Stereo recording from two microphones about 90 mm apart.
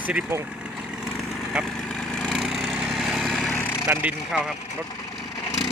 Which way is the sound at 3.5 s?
20° left (ahead or behind).